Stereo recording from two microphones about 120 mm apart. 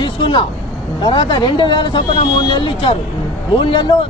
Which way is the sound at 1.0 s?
40° left (ahead or behind).